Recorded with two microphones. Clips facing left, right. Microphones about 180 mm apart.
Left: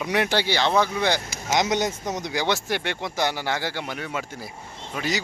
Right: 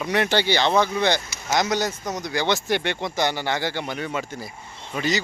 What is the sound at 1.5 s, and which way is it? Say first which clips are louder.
A man's voice: even; 20° left (ahead or behind).